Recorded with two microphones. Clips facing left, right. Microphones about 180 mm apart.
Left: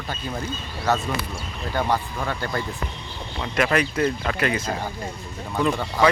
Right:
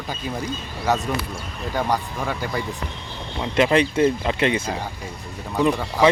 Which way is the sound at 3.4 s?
25° right (ahead or behind).